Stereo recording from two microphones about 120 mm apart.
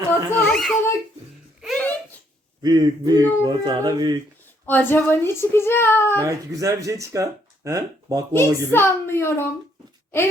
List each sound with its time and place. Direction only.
0.1 s a sound: 15° left (ahead or behind)
0.5 s a child's voice: centre (ahead or behind)
1.6 s a sound: 5° left (ahead or behind)
2.6 s speech: 35° right (ahead or behind)
4.6 s a child's voice: 15° left (ahead or behind)
6.1 s speech: 25° right (ahead or behind)
8.3 s a child's voice: 20° left (ahead or behind)